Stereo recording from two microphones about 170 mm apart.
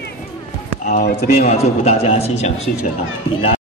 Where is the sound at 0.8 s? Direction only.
60° left (ahead or behind).